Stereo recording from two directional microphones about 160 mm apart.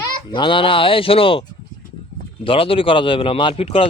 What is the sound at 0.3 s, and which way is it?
Speech, 30° left (ahead or behind).